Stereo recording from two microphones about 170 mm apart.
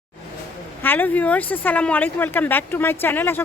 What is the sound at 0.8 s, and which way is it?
Speech, 10° left (ahead or behind).